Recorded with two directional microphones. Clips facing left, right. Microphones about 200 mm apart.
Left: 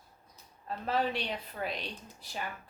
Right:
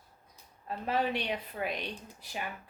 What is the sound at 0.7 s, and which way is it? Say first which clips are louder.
Speech: even; 15° right (ahead or behind).